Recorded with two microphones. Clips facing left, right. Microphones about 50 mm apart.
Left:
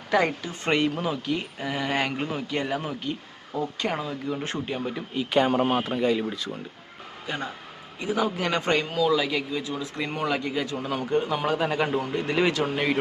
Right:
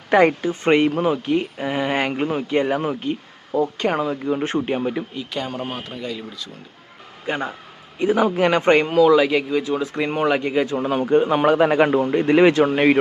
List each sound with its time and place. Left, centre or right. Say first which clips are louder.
0.1 s speech: right 8 dB; right
5.3 s speech: left 7 dB; left
7.3 s a man's voice: right 7 dB; right